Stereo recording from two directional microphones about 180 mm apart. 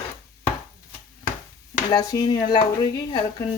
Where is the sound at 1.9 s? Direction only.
20° left (ahead or behind).